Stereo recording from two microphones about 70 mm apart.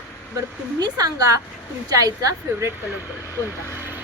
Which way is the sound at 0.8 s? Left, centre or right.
Right.